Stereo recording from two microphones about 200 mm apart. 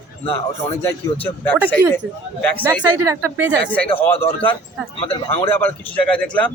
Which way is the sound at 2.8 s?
15° right (ahead or behind).